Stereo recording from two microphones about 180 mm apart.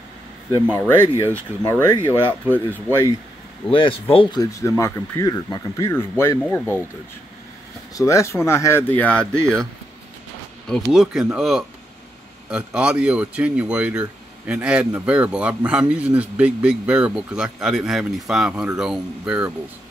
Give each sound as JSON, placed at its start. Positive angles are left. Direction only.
{"t": 0.7, "sound": "speech", "side_deg": 10}
{"t": 3.7, "sound": "speech", "side_deg": 30}
{"t": 7.9, "sound": "speech", "side_deg": 15}
{"t": 10.9, "sound": "speech", "side_deg": -5}